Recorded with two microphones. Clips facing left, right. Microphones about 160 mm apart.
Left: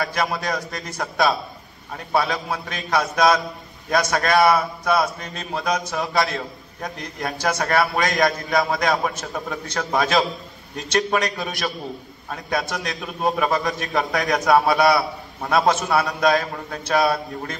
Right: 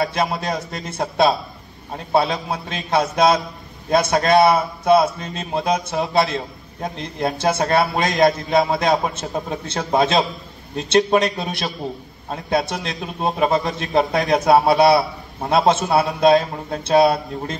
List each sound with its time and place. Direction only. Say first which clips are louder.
0.0 s speech: right 3 dB; 25° right (ahead or behind)